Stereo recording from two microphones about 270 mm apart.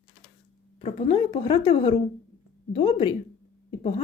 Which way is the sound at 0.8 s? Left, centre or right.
Left.